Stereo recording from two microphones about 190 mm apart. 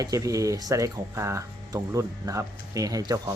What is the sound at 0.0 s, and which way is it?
Speech, 20° right (ahead or behind).